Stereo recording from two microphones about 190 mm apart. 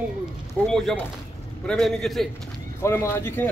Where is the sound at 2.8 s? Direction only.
15° left (ahead or behind).